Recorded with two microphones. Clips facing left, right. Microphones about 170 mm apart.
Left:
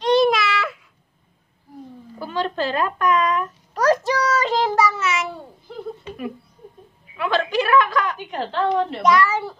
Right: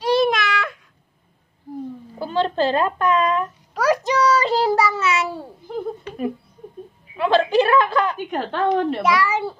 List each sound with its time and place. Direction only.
0.0 s baby cry: 5° right (ahead or behind)
2.1 s a child's voice: 30° right (ahead or behind)
3.7 s a sound: 10° right (ahead or behind)
4.2 s child singing: 30° right (ahead or behind)
7.2 s a woman's voice: 30° right (ahead or behind)
8.3 s a woman's voice: 50° right (ahead or behind)
9.0 s a child's voice: 10° right (ahead or behind)